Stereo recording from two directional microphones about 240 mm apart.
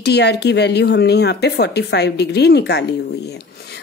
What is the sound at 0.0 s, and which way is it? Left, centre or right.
Speech, left.